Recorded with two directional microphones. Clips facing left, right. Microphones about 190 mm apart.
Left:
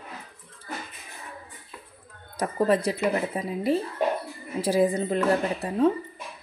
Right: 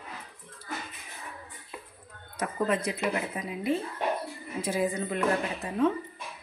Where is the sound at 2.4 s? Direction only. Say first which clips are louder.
Left 5 dB; 35° left (ahead or behind).